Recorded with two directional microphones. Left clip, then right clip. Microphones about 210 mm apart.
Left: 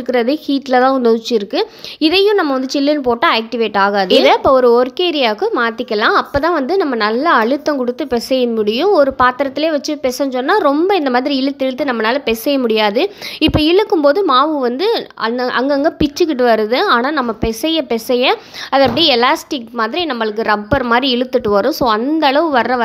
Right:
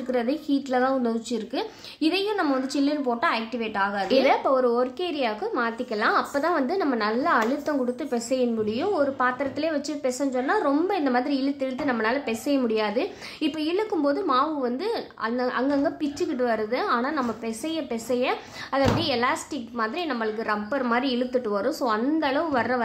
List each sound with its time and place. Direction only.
0.1 s a woman's voice: 40° left (ahead or behind)